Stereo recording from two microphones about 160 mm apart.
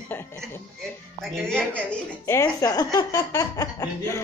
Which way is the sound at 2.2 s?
15° left (ahead or behind).